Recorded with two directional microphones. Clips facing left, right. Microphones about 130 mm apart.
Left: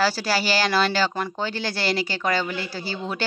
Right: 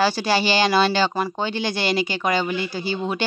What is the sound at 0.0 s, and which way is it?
Speech, 20° right (ahead or behind).